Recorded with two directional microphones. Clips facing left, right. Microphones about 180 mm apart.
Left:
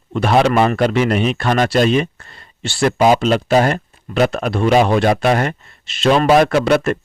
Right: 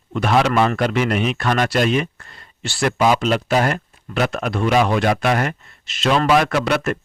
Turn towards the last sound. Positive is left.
turn(degrees=35)  # may be behind; listen again after turning